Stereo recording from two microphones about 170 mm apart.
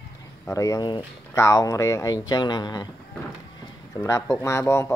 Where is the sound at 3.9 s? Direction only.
20° left (ahead or behind).